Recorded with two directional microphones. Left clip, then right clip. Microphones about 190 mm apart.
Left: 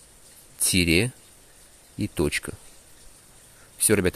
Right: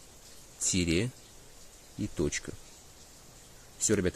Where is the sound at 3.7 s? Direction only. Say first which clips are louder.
Left 7 dB; 35° left (ahead or behind).